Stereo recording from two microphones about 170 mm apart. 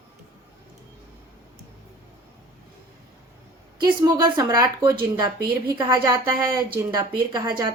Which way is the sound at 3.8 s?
25° right (ahead or behind).